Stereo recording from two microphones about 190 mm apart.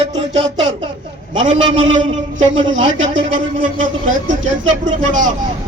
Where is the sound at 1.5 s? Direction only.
90° right.